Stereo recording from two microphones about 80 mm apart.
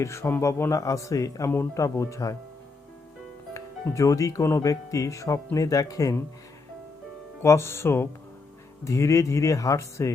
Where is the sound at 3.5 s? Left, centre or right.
Left.